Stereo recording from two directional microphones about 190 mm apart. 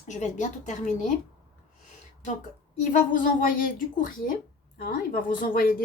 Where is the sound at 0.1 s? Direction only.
40° left (ahead or behind).